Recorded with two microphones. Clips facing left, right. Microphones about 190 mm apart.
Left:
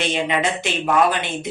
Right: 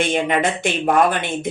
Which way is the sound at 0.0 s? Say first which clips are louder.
Right 3 dB; 50° right (ahead or behind).